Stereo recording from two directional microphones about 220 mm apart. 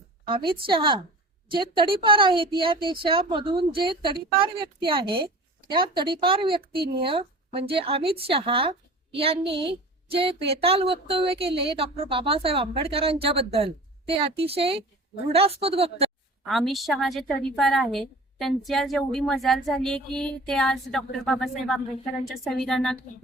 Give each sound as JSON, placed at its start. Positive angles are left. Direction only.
{"t": 0.3, "sound": "a woman's voice", "side_deg": -25}
{"t": 16.5, "sound": "speech", "side_deg": 0}